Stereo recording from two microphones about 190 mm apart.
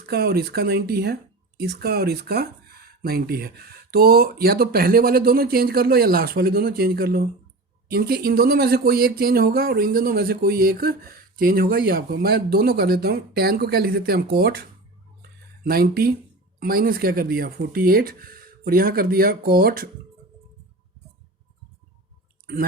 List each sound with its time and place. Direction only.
0.0 s speech: 55° right (ahead or behind)
15.6 s speech: 55° right (ahead or behind)